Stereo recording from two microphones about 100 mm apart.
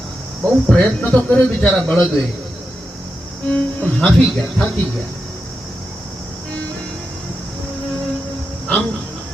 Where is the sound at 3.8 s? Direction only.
15° left (ahead or behind).